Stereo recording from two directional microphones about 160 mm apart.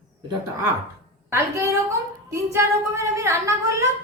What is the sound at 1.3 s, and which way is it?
A woman's voice, 15° right (ahead or behind).